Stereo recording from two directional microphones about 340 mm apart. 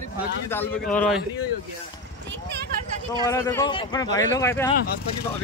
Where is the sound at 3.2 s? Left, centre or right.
Centre.